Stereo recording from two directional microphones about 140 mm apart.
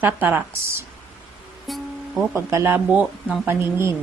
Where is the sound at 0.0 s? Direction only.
10° right (ahead or behind).